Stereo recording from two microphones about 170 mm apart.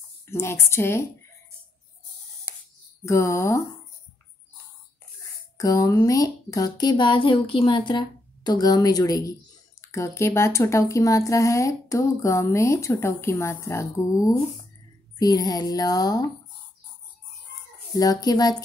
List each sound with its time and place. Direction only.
0.3 s speech: 15° left (ahead or behind)
3.1 s speech: 15° left (ahead or behind)
5.6 s speech: 20° left (ahead or behind)
17.9 s speech: 20° left (ahead or behind)